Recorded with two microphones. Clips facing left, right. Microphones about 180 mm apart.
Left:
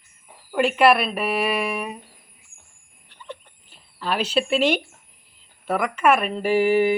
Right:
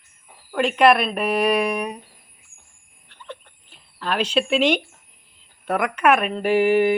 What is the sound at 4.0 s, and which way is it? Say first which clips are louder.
Speech: right 1 dB; 5° left (ahead or behind).